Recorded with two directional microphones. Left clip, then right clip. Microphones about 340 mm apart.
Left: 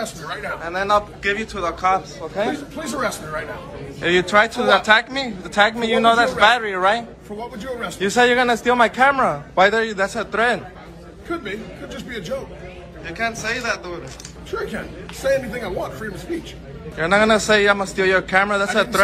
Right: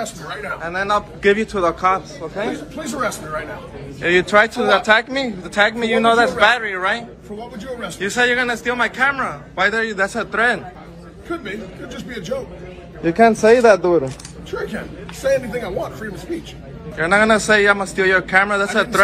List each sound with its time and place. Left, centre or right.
0.0 s speech: centre
13.0 s speech: centre
14.5 s speech: centre